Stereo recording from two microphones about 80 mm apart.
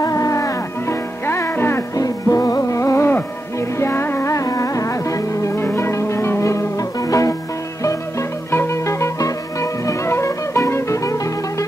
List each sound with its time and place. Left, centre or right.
0.0 s music: left
1.2 s music: left
2.0 s music: left
6.8 s music: left